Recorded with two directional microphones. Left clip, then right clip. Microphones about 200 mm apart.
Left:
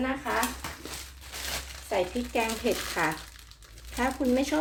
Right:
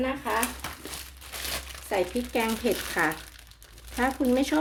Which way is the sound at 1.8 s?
35° right (ahead or behind).